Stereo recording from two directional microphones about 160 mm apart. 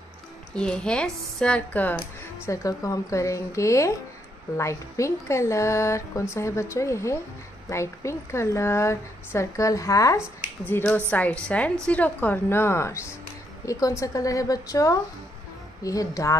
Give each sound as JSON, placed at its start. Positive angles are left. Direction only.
{"t": 0.6, "sound": "a woman's voice", "side_deg": 5}